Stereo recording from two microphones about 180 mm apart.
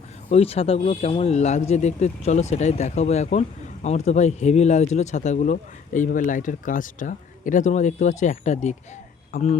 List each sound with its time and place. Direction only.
0.3 s speech: 35° left (ahead or behind)